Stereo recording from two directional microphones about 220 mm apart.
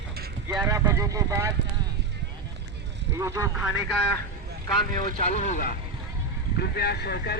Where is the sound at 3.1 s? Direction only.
15° right (ahead or behind).